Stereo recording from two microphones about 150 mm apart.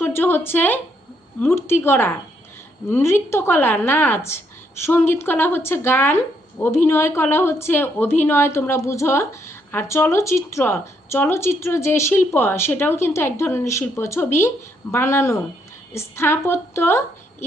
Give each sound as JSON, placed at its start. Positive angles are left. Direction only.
{"t": 0.0, "sound": "speech", "side_deg": 15}